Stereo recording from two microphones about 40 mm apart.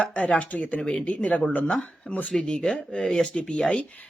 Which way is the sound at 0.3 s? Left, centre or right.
Left.